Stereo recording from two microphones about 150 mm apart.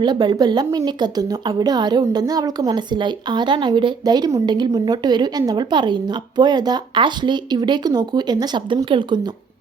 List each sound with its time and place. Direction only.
0.0 s a woman's voice: 30° right (ahead or behind)